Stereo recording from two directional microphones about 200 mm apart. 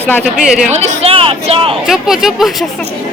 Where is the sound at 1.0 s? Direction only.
30° right (ahead or behind).